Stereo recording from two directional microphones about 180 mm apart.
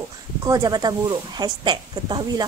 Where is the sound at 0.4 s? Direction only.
20° right (ahead or behind).